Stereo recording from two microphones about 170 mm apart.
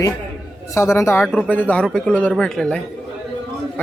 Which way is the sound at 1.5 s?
10° left (ahead or behind).